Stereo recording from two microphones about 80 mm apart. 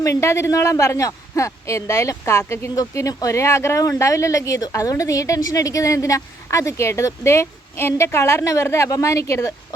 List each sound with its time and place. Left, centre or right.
0.0 s speech: left